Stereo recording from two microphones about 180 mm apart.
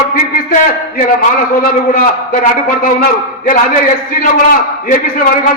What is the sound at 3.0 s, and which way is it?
A man's voice, 50° left (ahead or behind).